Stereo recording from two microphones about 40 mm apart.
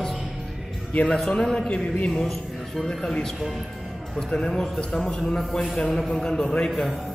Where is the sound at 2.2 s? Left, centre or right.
Centre.